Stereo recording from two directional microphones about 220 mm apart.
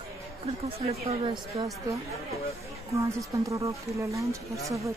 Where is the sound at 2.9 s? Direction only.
15° right (ahead or behind).